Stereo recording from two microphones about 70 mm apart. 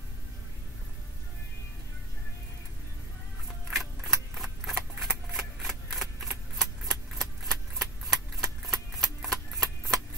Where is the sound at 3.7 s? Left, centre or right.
Centre.